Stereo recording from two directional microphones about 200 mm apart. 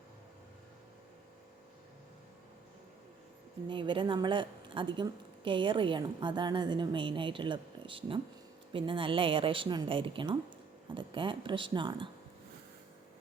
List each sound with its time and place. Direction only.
3.7 s a woman's voice: 25° right (ahead or behind)